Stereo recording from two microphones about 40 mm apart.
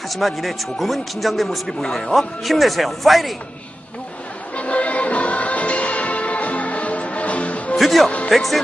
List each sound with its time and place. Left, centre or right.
0.1 s a man's voice: centre
4.6 s music: left
7.7 s music: centre
8.3 s a man's voice: centre